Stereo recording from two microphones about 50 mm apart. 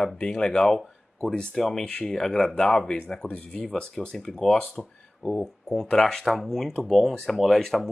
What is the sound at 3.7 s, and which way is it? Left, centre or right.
Speech, centre.